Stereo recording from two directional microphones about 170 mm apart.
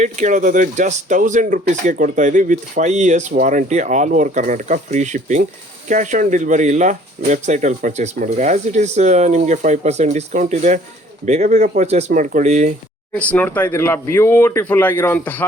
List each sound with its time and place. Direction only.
0.0 s speech: 45° right (ahead or behind)
13.1 s speech: 10° left (ahead or behind)